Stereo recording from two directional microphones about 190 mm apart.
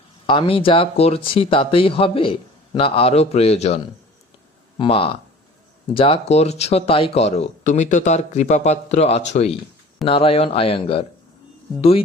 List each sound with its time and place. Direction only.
0.3 s speech: 25° left (ahead or behind)
4.8 s speech: 30° left (ahead or behind)